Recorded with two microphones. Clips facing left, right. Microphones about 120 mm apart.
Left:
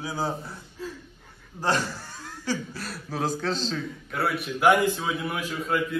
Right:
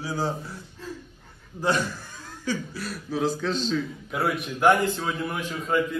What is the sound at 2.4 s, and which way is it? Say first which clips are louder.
Speech: right 1 dB; 35° left (ahead or behind).